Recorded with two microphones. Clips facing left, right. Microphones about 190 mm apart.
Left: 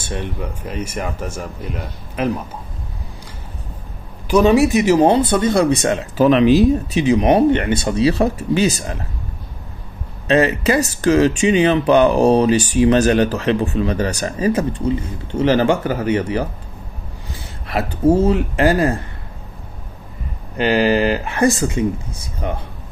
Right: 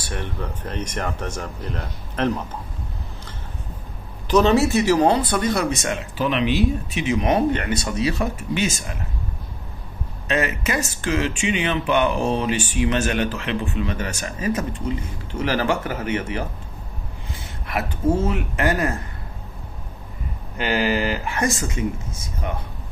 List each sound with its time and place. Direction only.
0.0 s speech: 15° left (ahead or behind)
4.3 s speech: 10° left (ahead or behind); by 8.9 s 35° left (ahead or behind)
10.2 s speech: 35° left (ahead or behind)
17.6 s speech: 30° left (ahead or behind)
21.3 s speech: 30° left (ahead or behind)